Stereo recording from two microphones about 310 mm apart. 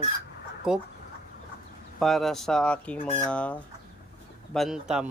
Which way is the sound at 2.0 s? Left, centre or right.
Centre.